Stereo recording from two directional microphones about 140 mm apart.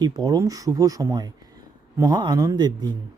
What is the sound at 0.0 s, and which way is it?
Speech, 30° right (ahead or behind).